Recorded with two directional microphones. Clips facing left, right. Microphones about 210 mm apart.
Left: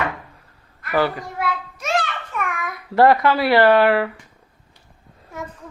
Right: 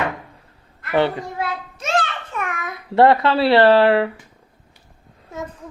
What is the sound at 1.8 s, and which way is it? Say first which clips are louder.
Babbling: right 2 dB; 25° right (ahead or behind).